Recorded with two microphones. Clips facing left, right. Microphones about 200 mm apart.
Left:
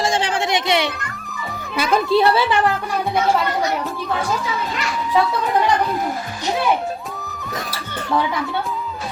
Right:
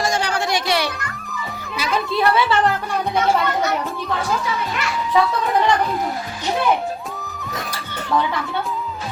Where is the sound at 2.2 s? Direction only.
30° left (ahead or behind).